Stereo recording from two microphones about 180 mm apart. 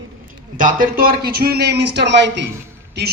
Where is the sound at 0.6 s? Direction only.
50° right (ahead or behind); by 2.4 s 75° right (ahead or behind).